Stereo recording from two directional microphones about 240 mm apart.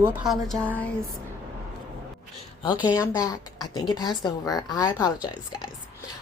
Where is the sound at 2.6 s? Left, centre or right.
Centre.